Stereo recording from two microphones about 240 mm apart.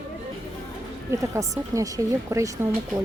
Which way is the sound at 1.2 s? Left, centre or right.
Centre.